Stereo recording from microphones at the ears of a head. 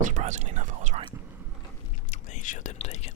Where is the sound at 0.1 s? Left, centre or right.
Right.